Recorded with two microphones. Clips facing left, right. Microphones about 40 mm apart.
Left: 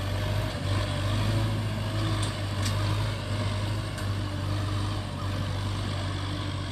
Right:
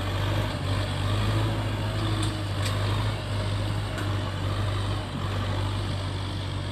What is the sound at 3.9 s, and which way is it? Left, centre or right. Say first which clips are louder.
Vehicle: right 3 dB; right.